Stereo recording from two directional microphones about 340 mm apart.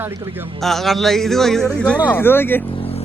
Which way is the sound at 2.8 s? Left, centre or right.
Centre.